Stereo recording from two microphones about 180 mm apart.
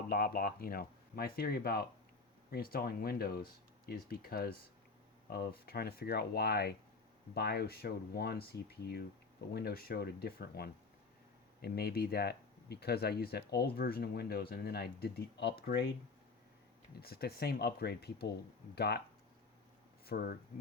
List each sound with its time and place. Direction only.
0.1 s speech: 55° left (ahead or behind)
17.0 s speech: 60° left (ahead or behind)
20.1 s speech: 55° left (ahead or behind)